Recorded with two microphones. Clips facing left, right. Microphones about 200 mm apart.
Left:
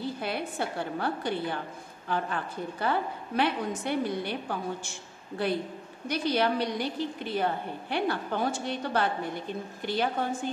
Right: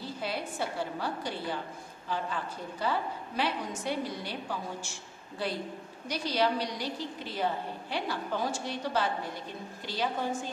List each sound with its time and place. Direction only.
0.0 s a woman's voice: 55° left (ahead or behind)
6.0 s a woman's voice: 55° left (ahead or behind)